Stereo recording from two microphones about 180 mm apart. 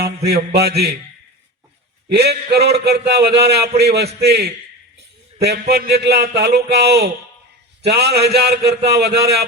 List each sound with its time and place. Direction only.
0.3 s a man's voice: 65° right (ahead or behind)
2.0 s a man's voice: 65° right (ahead or behind)